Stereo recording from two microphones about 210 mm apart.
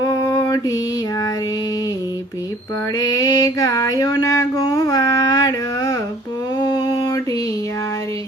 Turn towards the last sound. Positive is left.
turn(degrees=15)  # may be behind; listen again after turning